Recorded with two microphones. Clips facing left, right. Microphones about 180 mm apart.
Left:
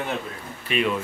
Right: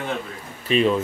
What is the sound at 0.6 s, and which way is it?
Speech, 30° right (ahead or behind).